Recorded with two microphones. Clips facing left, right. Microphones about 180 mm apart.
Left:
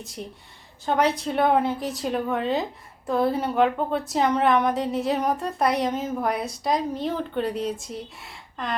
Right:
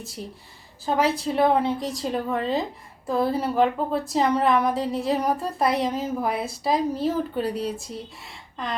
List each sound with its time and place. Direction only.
0.0 s a woman's voice: centre (ahead or behind)